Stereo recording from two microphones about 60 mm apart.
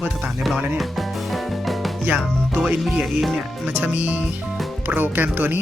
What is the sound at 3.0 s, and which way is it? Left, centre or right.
Speech, centre.